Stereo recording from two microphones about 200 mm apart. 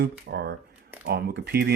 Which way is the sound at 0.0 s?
55° right (ahead or behind).